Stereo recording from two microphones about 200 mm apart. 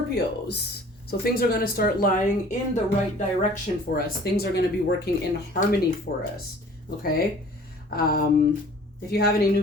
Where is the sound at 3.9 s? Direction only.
50° left (ahead or behind).